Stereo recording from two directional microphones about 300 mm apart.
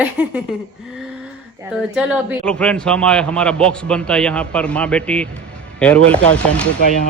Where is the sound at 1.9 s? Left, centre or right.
Centre.